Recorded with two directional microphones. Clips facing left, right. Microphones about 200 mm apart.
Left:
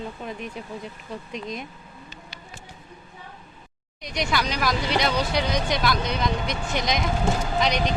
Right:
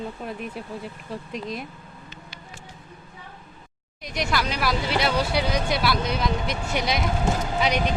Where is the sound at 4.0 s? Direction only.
Centre (ahead or behind).